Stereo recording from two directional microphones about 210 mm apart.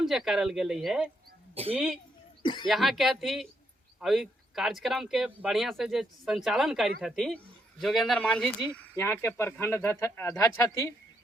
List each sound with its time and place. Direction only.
0.0 s speech: centre (ahead or behind)
2.4 s speech: 20° left (ahead or behind)
2.6 s speech: centre (ahead or behind)